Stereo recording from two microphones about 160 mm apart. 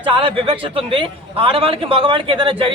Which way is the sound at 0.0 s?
35° right (ahead or behind).